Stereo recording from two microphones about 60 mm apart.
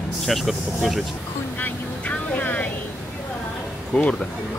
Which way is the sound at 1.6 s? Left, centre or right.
Left.